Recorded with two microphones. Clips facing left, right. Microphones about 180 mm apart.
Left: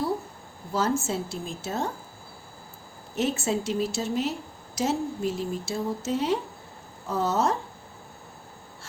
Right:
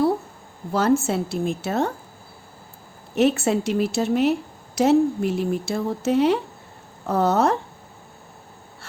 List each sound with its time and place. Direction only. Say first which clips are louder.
0.7 s a woman's voice: right 6 dB; 65° right (ahead or behind)
3.2 s a woman's voice: right 7 dB; 65° right (ahead or behind)